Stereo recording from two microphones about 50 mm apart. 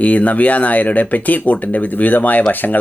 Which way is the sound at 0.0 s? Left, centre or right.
Left.